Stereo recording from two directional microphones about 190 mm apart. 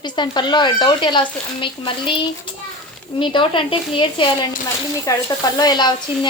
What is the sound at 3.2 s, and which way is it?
Speech, 25° left (ahead or behind).